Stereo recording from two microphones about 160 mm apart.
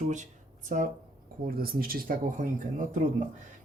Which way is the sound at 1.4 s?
65° right (ahead or behind).